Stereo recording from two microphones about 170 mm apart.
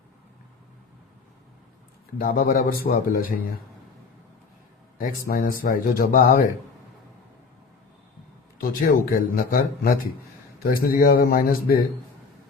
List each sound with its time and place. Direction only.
2.1 s speech: 55° left (ahead or behind)
4.9 s speech: 55° left (ahead or behind)
8.9 s speech: 55° left (ahead or behind)